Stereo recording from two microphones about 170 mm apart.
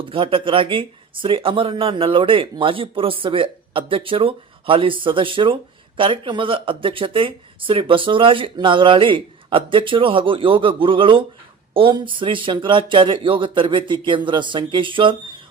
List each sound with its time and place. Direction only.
0.0 s speech: 30° right (ahead or behind)